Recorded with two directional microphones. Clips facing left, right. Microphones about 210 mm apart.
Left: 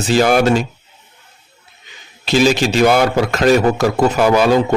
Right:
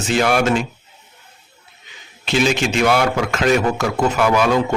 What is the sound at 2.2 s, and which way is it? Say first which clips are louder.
A man's voice: left 4 dB; 35° left (ahead or behind).